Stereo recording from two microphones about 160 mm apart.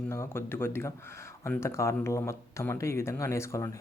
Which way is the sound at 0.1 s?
15° left (ahead or behind).